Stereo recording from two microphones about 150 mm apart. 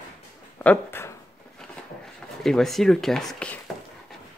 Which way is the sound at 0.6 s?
10° left (ahead or behind).